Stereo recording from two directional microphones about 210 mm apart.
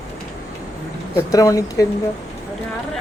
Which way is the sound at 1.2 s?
15° left (ahead or behind).